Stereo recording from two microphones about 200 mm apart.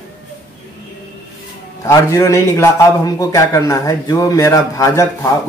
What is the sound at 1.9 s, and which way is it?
A man's voice, 15° left (ahead or behind).